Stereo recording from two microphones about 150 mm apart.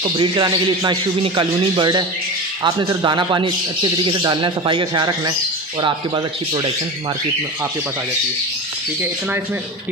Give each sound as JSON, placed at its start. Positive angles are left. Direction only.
{"t": 0.0, "sound": "a man's voice", "side_deg": -35}